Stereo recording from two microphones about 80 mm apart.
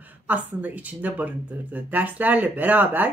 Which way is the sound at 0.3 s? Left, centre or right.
Right.